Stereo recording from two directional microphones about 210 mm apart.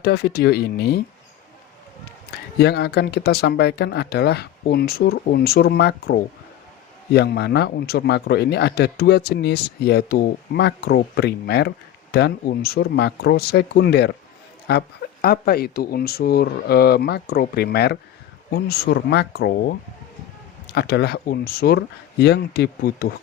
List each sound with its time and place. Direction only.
0.0 s speech: 50° left (ahead or behind)
2.3 s speech: 50° left (ahead or behind)